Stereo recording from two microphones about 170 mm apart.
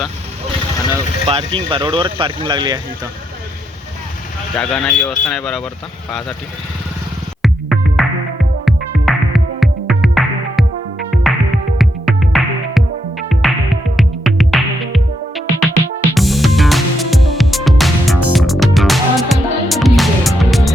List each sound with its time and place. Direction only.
1.3 s speech: 30° right (ahead or behind)
4.5 s speech: 5° left (ahead or behind)
7.4 s music: centre (ahead or behind)